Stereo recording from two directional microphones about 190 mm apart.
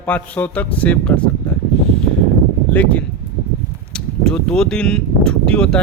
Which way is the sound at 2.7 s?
5° left (ahead or behind).